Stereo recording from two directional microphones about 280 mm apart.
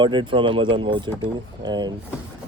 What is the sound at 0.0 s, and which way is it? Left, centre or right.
Speech, centre.